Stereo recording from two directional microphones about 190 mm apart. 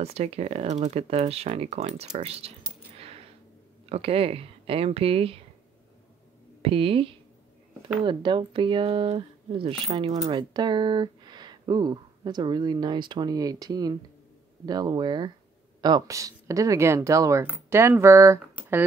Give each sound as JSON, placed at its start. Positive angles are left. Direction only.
{"t": 0.0, "sound": "speech", "side_deg": -35}
{"t": 3.0, "sound": "a sound", "side_deg": -30}
{"t": 3.9, "sound": "speech", "side_deg": -30}
{"t": 6.6, "sound": "speech", "side_deg": -30}